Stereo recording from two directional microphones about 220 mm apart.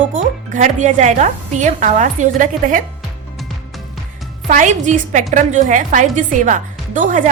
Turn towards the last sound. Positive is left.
turn(degrees=-35)  # may be behind; listen again after turning